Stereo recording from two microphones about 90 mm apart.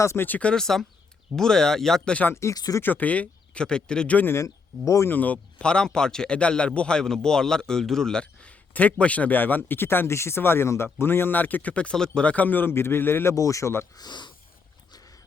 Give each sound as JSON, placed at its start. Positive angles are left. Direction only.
{"t": 0.0, "sound": "speech", "side_deg": 30}
{"t": 0.3, "sound": "speech", "side_deg": 15}
{"t": 2.3, "sound": "speech", "side_deg": 35}
{"t": 2.8, "sound": "speech", "side_deg": 20}
{"t": 13.3, "sound": "speech", "side_deg": 35}
{"t": 13.9, "sound": "speech", "side_deg": 50}